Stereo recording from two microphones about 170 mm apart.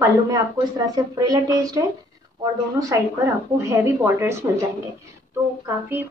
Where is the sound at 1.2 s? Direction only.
20° right (ahead or behind).